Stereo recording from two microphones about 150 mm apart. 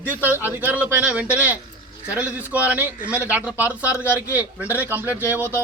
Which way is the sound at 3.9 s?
15° left (ahead or behind).